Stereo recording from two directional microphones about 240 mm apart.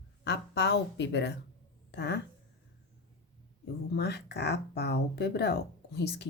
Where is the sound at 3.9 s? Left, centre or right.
Left.